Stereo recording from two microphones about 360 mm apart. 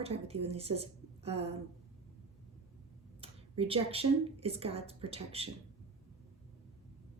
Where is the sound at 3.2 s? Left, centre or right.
Centre.